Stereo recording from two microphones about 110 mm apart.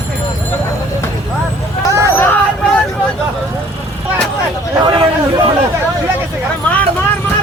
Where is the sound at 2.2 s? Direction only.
20° left (ahead or behind).